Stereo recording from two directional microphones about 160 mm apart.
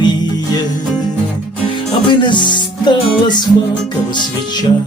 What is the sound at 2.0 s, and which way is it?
Music, 30° left (ahead or behind).